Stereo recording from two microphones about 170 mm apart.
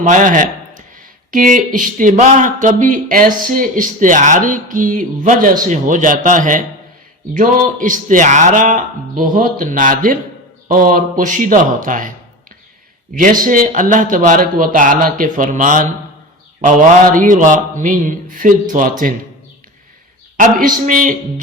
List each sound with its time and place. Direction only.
0.0 s speech: 50° right (ahead or behind)
13.1 s speech: 55° right (ahead or behind)
20.3 s speech: 50° right (ahead or behind)